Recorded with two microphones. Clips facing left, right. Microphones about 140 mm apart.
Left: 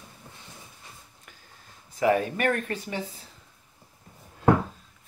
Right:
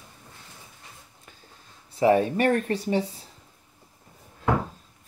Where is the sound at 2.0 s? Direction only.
30° right (ahead or behind).